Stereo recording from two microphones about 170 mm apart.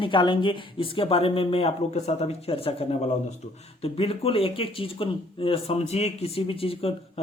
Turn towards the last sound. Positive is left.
turn(degrees=35)  # may be behind; listen again after turning